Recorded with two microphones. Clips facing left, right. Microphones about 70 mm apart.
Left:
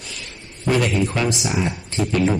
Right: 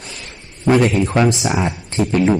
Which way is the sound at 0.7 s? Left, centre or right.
Right.